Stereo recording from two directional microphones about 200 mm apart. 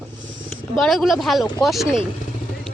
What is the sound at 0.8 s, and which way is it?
Speech, centre (ahead or behind).